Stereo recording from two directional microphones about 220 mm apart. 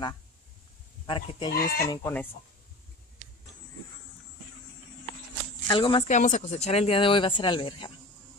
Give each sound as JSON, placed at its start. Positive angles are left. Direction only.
{"t": 1.0, "sound": "speech", "side_deg": 20}
{"t": 1.5, "sound": "speech", "side_deg": 40}
{"t": 1.9, "sound": "speech", "side_deg": 10}
{"t": 5.7, "sound": "speech", "side_deg": 20}
{"t": 6.0, "sound": "speech", "side_deg": 35}